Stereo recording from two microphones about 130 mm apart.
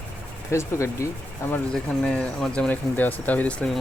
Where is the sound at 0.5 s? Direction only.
20° left (ahead or behind).